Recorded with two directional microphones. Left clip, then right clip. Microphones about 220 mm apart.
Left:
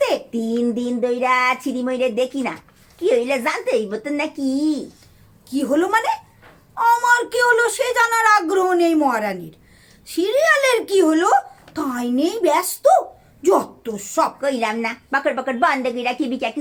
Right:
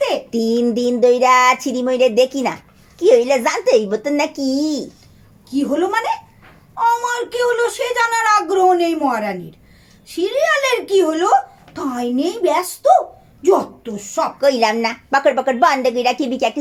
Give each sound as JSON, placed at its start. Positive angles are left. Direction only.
{"t": 0.3, "sound": "a woman's voice", "side_deg": -40}
{"t": 0.5, "sound": "a sound", "side_deg": -30}
{"t": 0.8, "sound": "a woman's voice", "side_deg": -35}
{"t": 5.5, "sound": "speech", "side_deg": 40}
{"t": 14.4, "sound": "a woman's voice", "side_deg": -35}